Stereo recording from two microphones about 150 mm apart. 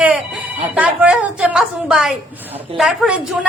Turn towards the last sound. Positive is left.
turn(degrees=-5)  # may be behind; listen again after turning